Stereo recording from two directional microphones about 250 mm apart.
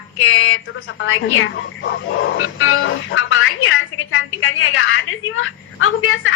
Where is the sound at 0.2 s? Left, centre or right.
Left.